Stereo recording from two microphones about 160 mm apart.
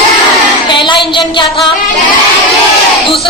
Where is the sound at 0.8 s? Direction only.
30° left (ahead or behind).